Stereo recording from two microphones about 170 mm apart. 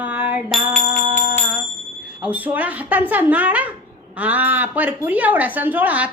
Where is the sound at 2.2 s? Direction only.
10° right (ahead or behind).